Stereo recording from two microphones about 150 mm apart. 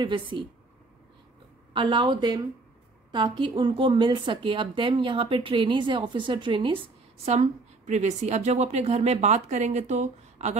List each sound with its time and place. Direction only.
0.0 s a woman's voice: 35° right (ahead or behind)
1.7 s a woman's voice: 30° right (ahead or behind)
7.2 s a woman's voice: 50° right (ahead or behind)